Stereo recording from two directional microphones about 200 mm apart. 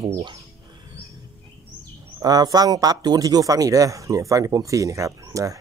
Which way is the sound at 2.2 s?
20° right (ahead or behind).